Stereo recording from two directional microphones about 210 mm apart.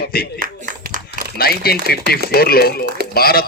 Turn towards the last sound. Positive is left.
turn(degrees=45)  # may be behind; listen again after turning